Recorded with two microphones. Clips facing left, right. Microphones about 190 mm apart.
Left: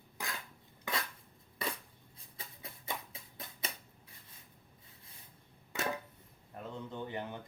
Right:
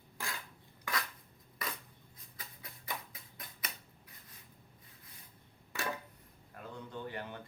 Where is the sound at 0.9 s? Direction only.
20° left (ahead or behind).